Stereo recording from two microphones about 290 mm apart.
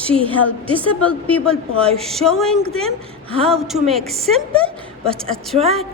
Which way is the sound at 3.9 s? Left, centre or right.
Centre.